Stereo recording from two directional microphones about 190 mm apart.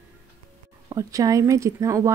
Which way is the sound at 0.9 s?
15° right (ahead or behind).